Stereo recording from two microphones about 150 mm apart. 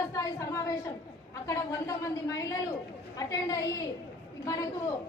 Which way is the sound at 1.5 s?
20° left (ahead or behind).